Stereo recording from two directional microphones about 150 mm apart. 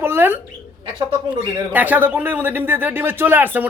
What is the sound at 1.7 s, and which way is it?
A woman's voice, 10° right (ahead or behind).